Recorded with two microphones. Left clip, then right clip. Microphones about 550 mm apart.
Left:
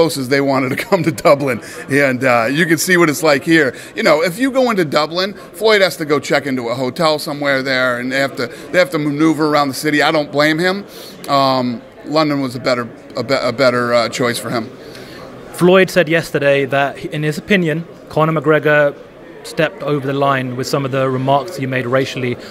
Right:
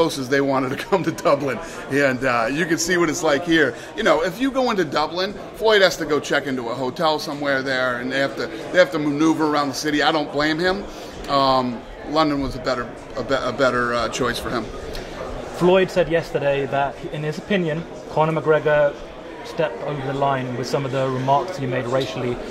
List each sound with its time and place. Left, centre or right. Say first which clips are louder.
0.0 s speech: left 5 dB; left
15.6 s speech: left 6 dB; left